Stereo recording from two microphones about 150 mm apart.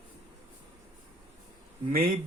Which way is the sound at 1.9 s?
65° right (ahead or behind).